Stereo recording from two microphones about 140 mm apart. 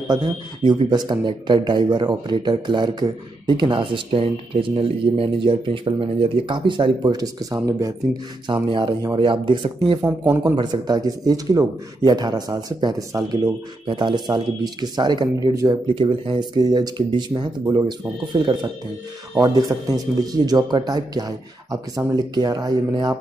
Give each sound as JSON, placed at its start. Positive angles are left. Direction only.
{"t": 0.1, "sound": "speech", "side_deg": -30}
{"t": 10.0, "sound": "speech", "side_deg": -15}
{"t": 10.4, "sound": "speech", "side_deg": -30}
{"t": 15.9, "sound": "speech", "side_deg": -35}
{"t": 17.6, "sound": "speech", "side_deg": -25}
{"t": 18.3, "sound": "speech", "side_deg": -35}